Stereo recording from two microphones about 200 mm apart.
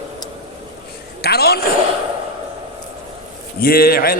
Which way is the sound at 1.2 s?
50° left (ahead or behind).